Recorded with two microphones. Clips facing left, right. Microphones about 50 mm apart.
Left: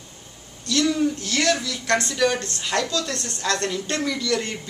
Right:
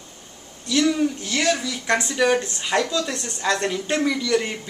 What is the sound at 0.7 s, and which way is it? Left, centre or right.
Speech, centre.